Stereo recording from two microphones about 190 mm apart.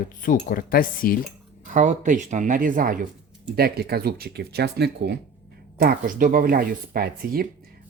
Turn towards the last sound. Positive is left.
turn(degrees=-50)  # may be behind; listen again after turning